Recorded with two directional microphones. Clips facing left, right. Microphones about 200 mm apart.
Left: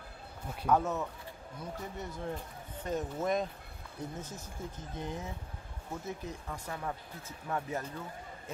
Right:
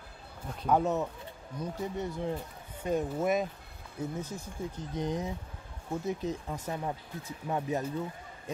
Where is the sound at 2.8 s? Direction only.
10° right (ahead or behind).